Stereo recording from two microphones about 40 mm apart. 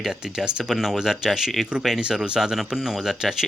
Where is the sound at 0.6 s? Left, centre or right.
Centre.